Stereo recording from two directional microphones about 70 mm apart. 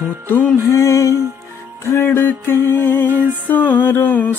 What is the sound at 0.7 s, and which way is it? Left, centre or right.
Mantra, left.